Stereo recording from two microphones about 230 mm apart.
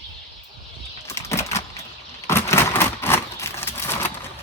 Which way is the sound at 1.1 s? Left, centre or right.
Centre.